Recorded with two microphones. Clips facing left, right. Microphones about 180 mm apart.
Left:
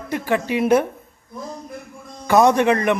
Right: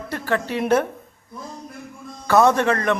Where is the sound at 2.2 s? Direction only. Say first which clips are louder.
Left 2 dB; 15° left (ahead or behind).